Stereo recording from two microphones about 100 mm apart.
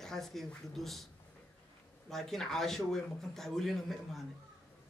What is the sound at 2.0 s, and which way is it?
Speech, 5° left (ahead or behind).